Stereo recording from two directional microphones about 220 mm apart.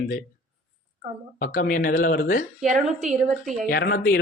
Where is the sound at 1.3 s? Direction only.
40° left (ahead or behind).